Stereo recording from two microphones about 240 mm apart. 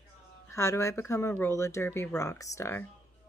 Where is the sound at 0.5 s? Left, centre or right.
Centre.